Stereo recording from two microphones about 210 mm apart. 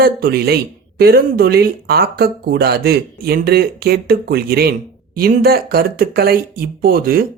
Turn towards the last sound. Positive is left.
turn(degrees=-45)  # may be behind; listen again after turning